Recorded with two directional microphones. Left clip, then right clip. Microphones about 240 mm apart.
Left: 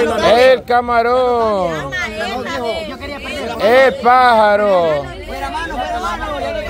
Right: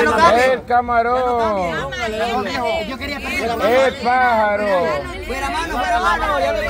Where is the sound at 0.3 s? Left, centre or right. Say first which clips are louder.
Left 4 dB; left.